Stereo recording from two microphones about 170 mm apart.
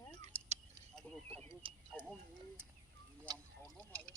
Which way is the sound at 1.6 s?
30° right (ahead or behind).